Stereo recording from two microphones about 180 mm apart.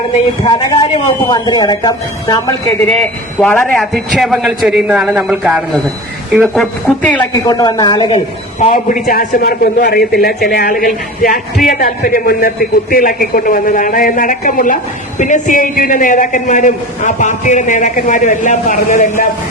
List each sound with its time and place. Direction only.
0.4 s speech: 30° left (ahead or behind)
2.8 s a man's voice: 5° left (ahead or behind)
7.4 s speech: 20° left (ahead or behind)
8.1 s a woman's voice: 35° left (ahead or behind)
9.0 s a man's voice: 55° left (ahead or behind)